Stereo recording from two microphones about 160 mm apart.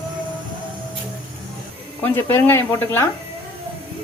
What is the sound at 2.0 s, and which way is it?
Speech, 15° left (ahead or behind).